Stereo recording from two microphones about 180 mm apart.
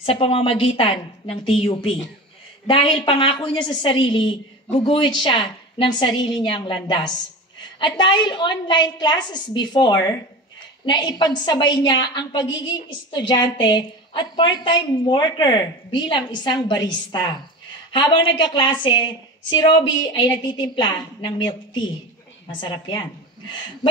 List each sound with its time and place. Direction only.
0.0 s a woman's voice: 30° left (ahead or behind)
20.1 s a woman's voice: 25° left (ahead or behind)